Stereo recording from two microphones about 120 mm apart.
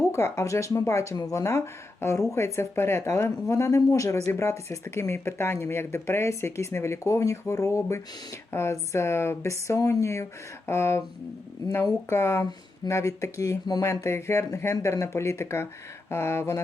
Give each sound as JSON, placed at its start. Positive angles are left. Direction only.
{"t": 0.1, "sound": "speech", "side_deg": 20}